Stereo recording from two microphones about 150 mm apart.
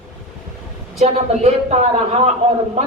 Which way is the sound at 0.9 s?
45° right (ahead or behind).